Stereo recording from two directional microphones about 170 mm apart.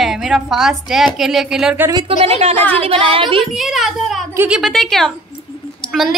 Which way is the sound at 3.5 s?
Centre (ahead or behind).